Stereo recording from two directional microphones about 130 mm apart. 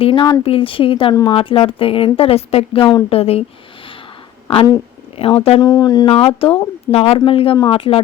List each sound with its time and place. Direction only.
0.0 s a woman's voice: 35° left (ahead or behind)
1.1 s speech: 30° left (ahead or behind)
1.4 s a woman's voice: 45° left (ahead or behind)
5.1 s a woman's voice: 50° left (ahead or behind)
5.6 s speech: 30° left (ahead or behind)
6.1 s a woman's voice: 45° left (ahead or behind)